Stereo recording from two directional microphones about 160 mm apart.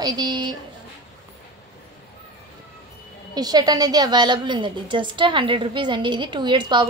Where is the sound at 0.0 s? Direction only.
25° right (ahead or behind).